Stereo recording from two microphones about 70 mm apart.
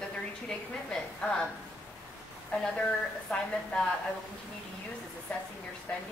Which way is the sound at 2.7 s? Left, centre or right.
Centre.